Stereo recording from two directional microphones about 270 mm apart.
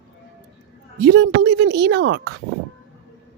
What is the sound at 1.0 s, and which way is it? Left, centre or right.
Speech, right.